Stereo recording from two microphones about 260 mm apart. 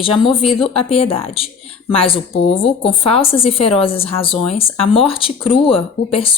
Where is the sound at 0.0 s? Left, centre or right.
Centre.